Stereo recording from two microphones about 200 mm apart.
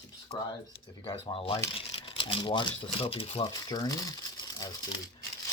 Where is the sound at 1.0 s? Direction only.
30° left (ahead or behind).